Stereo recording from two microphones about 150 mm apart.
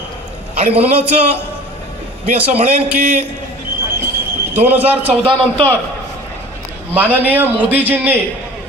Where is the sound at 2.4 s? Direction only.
45° right (ahead or behind).